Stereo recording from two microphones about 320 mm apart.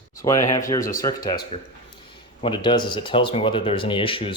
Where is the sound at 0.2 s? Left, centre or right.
Centre.